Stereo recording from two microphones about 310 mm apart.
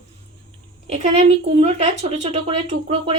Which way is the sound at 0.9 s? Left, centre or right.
Centre.